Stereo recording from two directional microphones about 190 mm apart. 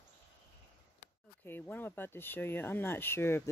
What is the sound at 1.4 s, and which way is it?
Speech, 10° left (ahead or behind).